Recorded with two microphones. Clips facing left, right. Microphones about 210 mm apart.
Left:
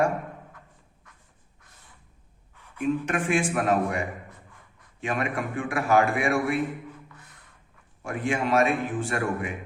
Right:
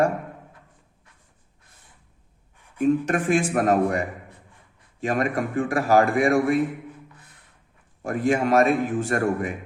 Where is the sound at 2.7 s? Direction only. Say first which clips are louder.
Right 5 dB; 35° right (ahead or behind).